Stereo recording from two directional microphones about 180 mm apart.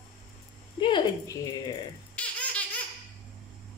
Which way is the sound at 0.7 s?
25° left (ahead or behind).